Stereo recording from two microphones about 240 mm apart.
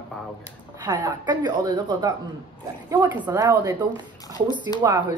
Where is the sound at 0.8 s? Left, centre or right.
Centre.